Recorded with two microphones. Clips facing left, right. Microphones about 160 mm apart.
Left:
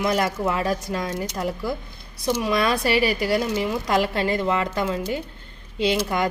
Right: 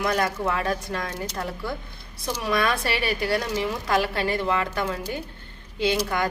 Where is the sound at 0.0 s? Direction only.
25° left (ahead or behind).